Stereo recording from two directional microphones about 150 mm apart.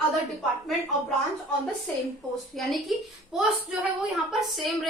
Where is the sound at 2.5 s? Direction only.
Centre (ahead or behind).